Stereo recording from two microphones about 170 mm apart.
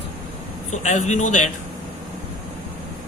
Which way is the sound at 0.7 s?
45° left (ahead or behind).